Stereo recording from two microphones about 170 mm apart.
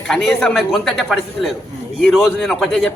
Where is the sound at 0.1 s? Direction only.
5° left (ahead or behind).